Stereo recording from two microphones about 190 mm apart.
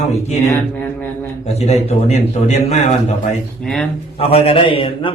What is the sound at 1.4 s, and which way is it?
A man's voice, 35° left (ahead or behind).